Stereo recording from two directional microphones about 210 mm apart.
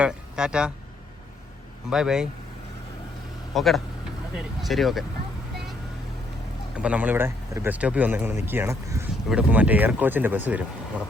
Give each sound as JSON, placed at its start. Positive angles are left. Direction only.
{"t": 0.0, "sound": "speech", "side_deg": -5}
{"t": 1.9, "sound": "speech", "side_deg": -5}
{"t": 3.5, "sound": "speech", "side_deg": 0}
{"t": 6.7, "sound": "speech", "side_deg": -5}